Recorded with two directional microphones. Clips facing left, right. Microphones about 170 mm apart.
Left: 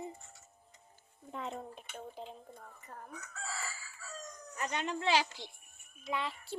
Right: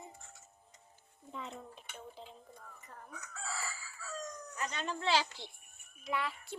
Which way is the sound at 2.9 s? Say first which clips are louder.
Left 4 dB; 40° left (ahead or behind).